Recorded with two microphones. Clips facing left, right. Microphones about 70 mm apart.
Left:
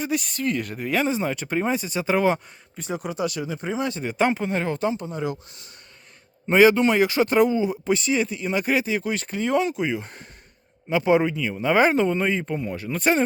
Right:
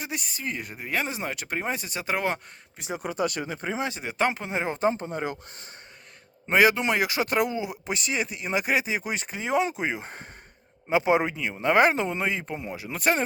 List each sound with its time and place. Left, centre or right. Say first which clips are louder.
0.0 s speech: left 8 dB; centre
2.9 s speech: left 1 dB; right
3.8 s speech: left 5 dB; centre
4.0 s speech: left 5 dB; centre
4.4 s speech: left 2 dB; centre
4.9 s speech: even; right
6.5 s speech: left 5 dB; centre
9.6 s speech: left 4 dB; right
11.6 s speech: left 2 dB; centre